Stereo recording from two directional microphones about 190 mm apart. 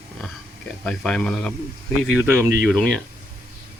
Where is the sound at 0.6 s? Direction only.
5° left (ahead or behind).